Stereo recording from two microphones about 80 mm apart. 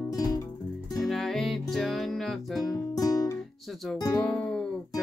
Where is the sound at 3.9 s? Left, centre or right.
Left.